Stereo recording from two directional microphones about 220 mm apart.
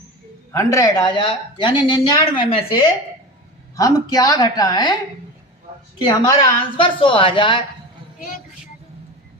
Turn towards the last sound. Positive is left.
turn(degrees=20)  # may be behind; listen again after turning